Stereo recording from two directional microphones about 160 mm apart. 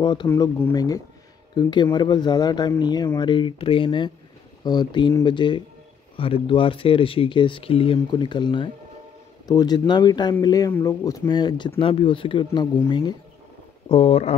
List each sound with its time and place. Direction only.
0.0 s speech: 30° left (ahead or behind)
0.3 s speech: 15° left (ahead or behind); by 14.3 s 40° left (ahead or behind)